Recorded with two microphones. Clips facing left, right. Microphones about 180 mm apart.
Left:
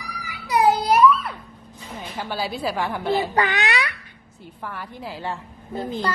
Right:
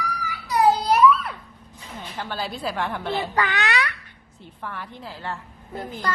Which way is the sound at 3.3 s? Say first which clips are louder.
Left 2 dB; 15° left (ahead or behind).